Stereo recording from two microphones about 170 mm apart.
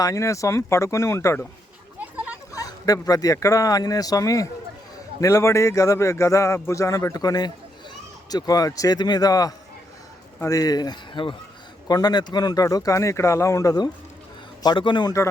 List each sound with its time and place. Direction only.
0.0 s speech: 20° left (ahead or behind)
2.0 s a sound: 10° right (ahead or behind)
2.5 s speech: 20° left (ahead or behind)